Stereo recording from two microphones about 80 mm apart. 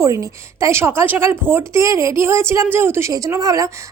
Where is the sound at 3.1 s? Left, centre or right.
Right.